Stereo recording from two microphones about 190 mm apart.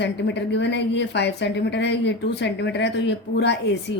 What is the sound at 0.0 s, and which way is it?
A woman's voice, 65° left (ahead or behind).